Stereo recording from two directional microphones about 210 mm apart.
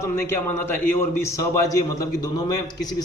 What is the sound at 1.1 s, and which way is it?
A man's voice, 15° left (ahead or behind).